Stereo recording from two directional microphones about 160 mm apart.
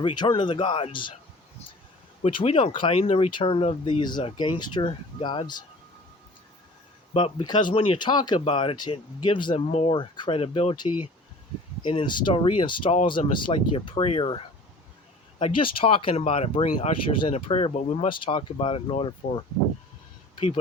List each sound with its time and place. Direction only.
0.0 s speech: 30° left (ahead or behind)
2.2 s speech: 35° left (ahead or behind)
7.1 s speech: 35° left (ahead or behind)